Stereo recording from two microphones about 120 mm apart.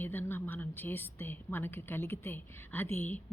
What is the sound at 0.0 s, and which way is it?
A woman's voice, 15° left (ahead or behind).